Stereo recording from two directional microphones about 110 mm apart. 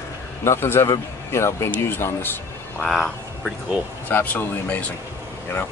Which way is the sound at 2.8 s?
5° left (ahead or behind).